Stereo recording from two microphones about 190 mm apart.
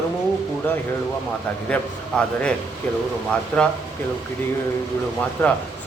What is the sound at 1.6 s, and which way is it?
Speech, 5° left (ahead or behind).